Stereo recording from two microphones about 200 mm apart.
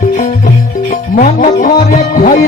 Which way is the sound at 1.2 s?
40° left (ahead or behind).